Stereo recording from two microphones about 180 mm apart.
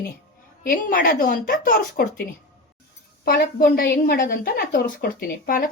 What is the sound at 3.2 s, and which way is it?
A woman's voice, 55° left (ahead or behind).